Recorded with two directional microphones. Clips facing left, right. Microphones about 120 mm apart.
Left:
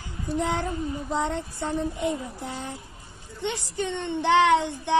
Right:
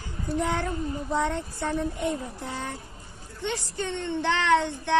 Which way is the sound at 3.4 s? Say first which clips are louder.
Left 2 dB; 20° left (ahead or behind).